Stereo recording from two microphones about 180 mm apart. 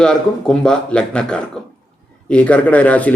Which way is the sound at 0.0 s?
5° left (ahead or behind).